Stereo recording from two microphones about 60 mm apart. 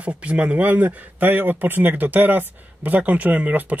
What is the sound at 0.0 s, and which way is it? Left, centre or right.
Speech, right.